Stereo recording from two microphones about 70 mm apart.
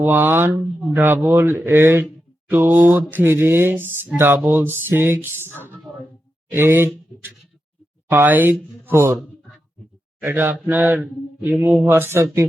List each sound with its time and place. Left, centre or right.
0.0 s speech: right
6.5 s speech: right
10.2 s speech: right